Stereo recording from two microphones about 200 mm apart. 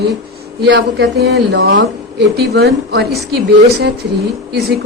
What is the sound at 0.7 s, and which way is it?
A woman's voice, 60° right (ahead or behind).